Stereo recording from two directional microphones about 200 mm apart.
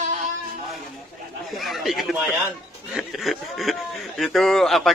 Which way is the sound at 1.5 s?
Centre (ahead or behind).